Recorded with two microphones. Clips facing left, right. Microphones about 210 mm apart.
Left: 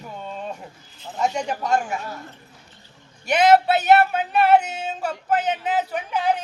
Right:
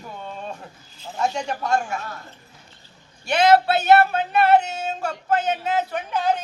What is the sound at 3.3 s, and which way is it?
Speech, 20° left (ahead or behind).